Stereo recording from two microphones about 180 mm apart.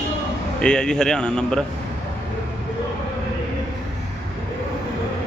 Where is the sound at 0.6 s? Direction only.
5° left (ahead or behind).